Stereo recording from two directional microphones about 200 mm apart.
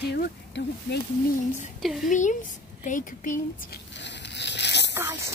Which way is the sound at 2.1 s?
40° left (ahead or behind).